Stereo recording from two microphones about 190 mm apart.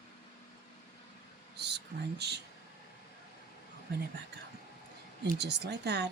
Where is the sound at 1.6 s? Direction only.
60° right (ahead or behind).